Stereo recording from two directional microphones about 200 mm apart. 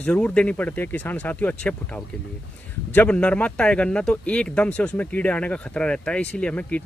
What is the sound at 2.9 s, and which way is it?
Speech, 5° left (ahead or behind).